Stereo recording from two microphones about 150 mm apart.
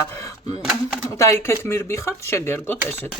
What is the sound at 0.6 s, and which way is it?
Typewriter, 5° right (ahead or behind).